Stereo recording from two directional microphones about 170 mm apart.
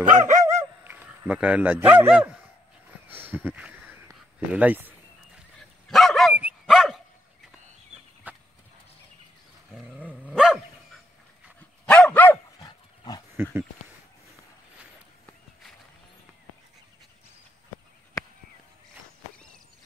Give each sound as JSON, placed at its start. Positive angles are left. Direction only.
{"t": 0.0, "sound": "a sound", "side_deg": -50}
{"t": 0.8, "sound": "a man's voice", "side_deg": -10}
{"t": 3.2, "sound": "a sound", "side_deg": -10}
{"t": 4.5, "sound": "speech", "side_deg": -10}
{"t": 5.6, "sound": "dog", "side_deg": 0}
{"t": 8.3, "sound": "a sound", "side_deg": -10}
{"t": 9.7, "sound": "dog", "side_deg": -5}
{"t": 11.8, "sound": "dog", "side_deg": 5}
{"t": 12.6, "sound": "dog", "side_deg": 25}
{"t": 13.4, "sound": "speech", "side_deg": -15}